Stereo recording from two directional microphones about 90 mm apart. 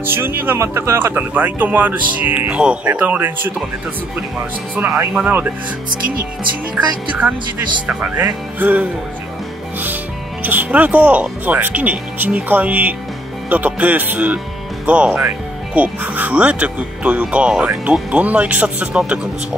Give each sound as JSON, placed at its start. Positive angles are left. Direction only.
{"t": 0.0, "sound": "speech", "side_deg": -25}
{"t": 4.7, "sound": "speech", "side_deg": -20}
{"t": 7.1, "sound": "speech", "side_deg": -20}
{"t": 10.4, "sound": "speech", "side_deg": -20}